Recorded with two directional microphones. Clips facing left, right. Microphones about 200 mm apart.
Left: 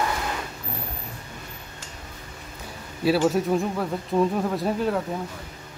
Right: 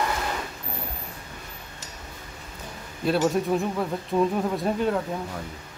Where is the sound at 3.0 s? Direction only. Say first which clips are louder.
Left 2 dB; 5° left (ahead or behind).